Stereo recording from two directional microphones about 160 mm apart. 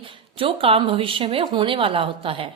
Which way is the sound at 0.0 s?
35° right (ahead or behind).